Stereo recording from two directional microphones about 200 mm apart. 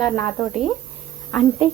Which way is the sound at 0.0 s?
15° left (ahead or behind).